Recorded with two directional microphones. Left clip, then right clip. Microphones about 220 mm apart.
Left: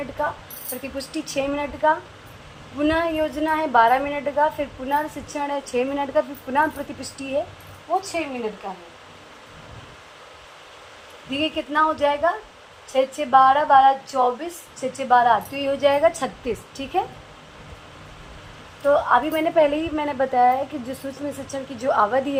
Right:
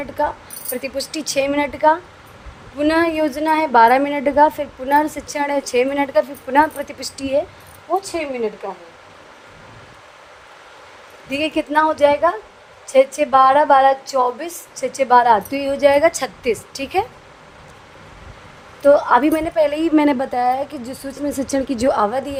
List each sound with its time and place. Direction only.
0.9 s a woman's voice: 50° right (ahead or behind)
11.3 s a woman's voice: 55° right (ahead or behind)
18.9 s a woman's voice: 55° right (ahead or behind)